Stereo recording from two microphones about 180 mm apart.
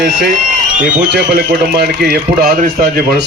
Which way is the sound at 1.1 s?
60° right (ahead or behind).